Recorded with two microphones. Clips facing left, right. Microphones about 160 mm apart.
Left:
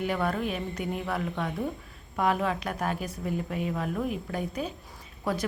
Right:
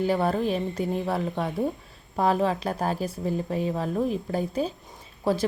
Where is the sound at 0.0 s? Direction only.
30° right (ahead or behind).